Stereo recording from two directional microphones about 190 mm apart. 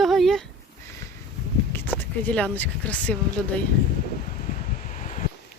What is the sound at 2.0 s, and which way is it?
Speech, 5° left (ahead or behind).